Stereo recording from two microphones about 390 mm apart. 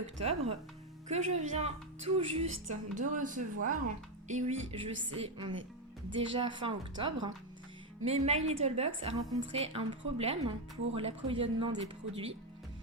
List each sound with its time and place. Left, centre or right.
0.2 s a woman's voice: centre
3.5 s speech: right
4.3 s a woman's voice: centre